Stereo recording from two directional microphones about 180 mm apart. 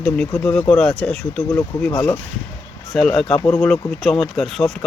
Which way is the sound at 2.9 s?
Centre (ahead or behind).